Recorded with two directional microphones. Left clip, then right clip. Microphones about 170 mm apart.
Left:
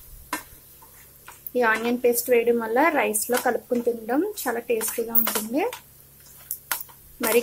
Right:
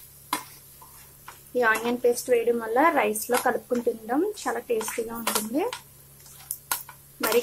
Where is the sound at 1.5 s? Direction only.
Centre (ahead or behind).